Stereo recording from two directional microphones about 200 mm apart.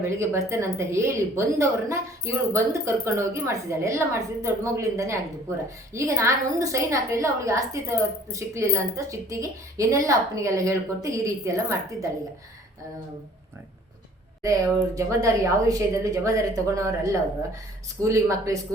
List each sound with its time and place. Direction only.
0.2 s a woman's voice: 15° right (ahead or behind)
14.4 s a woman's voice: 15° right (ahead or behind)